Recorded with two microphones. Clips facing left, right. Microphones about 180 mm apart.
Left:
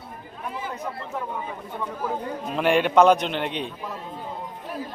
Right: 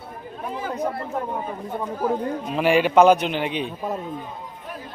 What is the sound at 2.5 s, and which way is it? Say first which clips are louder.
A man's voice: right 2 dB; 5° right (ahead or behind).